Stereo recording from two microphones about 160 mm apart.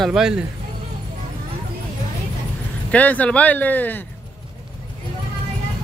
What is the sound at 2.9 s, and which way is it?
Speech, 10° left (ahead or behind).